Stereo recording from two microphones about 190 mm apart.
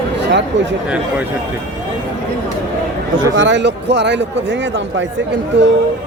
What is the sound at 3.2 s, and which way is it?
A man's voice, 75° right (ahead or behind).